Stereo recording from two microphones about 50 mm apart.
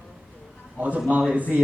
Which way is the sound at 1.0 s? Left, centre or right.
Right.